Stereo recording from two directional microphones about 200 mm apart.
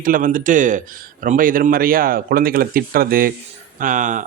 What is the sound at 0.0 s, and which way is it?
Speech, 45° right (ahead or behind).